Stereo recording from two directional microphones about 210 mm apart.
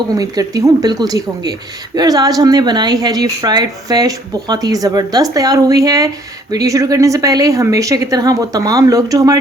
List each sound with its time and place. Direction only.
0.1 s speech: 15° right (ahead or behind)